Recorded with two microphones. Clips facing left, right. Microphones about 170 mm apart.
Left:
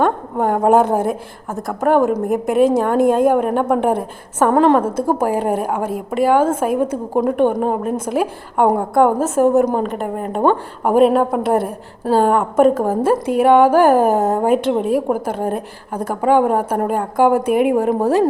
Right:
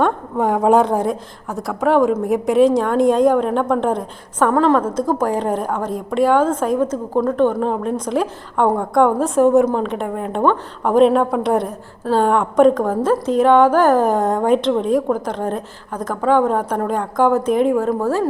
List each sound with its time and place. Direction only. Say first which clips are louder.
0.0 s a woman's voice: left 1 dB; centre (ahead or behind)
4.5 s a woman's voice: left 2 dB; 20° left (ahead or behind)
4.9 s a woman's voice: left 1 dB; 10° left (ahead or behind)